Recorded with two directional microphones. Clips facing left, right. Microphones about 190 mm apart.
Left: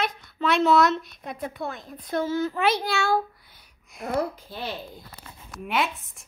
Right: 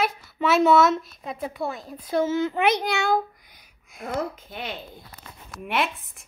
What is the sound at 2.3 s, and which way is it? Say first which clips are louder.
A child's voice: left 1 dB; 20° right (ahead or behind).